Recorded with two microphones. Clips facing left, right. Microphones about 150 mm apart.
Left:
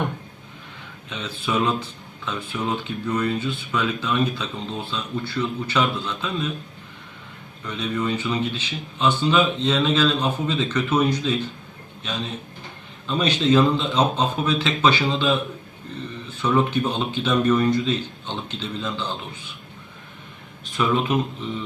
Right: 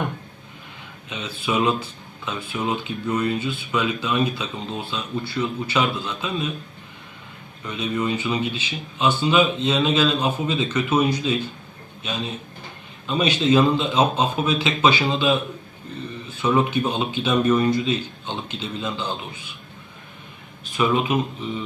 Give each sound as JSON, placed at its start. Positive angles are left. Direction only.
{"t": 1.1, "sound": "speech", "side_deg": -10}
{"t": 7.6, "sound": "speech", "side_deg": -10}
{"t": 16.4, "sound": "speech", "side_deg": -10}
{"t": 20.7, "sound": "speech", "side_deg": -5}